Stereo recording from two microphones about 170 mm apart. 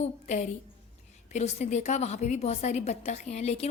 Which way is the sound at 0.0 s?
40° left (ahead or behind).